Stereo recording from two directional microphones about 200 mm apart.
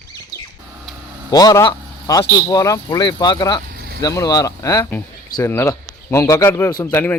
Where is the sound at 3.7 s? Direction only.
50° right (ahead or behind).